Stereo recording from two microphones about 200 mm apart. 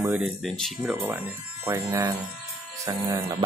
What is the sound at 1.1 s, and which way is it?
Speech, 10° right (ahead or behind).